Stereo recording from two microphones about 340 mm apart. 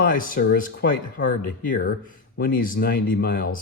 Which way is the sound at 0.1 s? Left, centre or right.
Left.